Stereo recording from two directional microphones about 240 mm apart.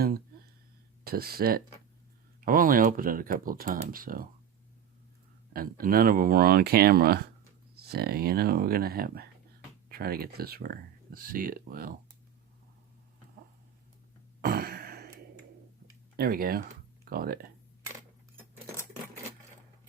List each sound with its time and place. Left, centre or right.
1.0 s speech: right
5.5 s speech: right
14.4 s a sound: right
16.1 s speech: right